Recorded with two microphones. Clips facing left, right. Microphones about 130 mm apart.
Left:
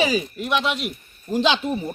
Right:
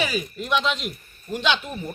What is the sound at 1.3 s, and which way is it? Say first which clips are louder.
Speech: left 4 dB; 30° left (ahead or behind).